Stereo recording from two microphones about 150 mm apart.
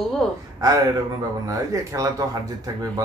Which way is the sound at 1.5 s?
20° right (ahead or behind).